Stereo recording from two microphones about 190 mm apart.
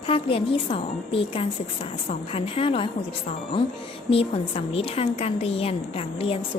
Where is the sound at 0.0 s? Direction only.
30° left (ahead or behind).